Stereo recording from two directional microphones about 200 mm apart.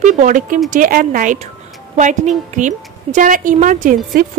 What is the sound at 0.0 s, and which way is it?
A woman's voice, 40° right (ahead or behind).